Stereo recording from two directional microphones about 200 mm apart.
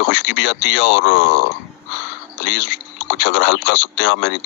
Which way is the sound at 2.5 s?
60° left (ahead or behind).